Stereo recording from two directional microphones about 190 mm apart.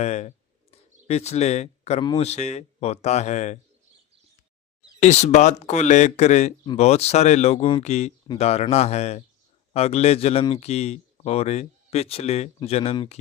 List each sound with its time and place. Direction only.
0.0 s a sound: 35° left (ahead or behind)
2.0 s speech: 35° left (ahead or behind)
4.9 s speech: 35° left (ahead or behind)